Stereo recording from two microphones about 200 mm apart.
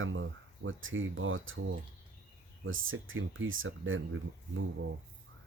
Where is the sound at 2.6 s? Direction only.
80° right.